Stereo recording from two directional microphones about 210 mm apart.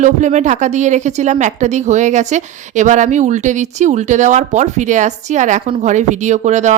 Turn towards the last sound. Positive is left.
turn(degrees=-35)  # may be behind; listen again after turning